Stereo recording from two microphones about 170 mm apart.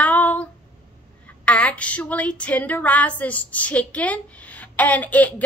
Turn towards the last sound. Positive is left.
turn(degrees=10)  # may be behind; listen again after turning